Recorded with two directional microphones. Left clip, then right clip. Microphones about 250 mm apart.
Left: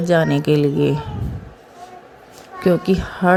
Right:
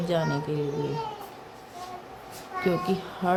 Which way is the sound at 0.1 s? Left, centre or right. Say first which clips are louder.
Left 12 dB; left.